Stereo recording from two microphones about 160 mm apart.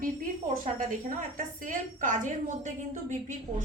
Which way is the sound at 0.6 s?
55° right (ahead or behind).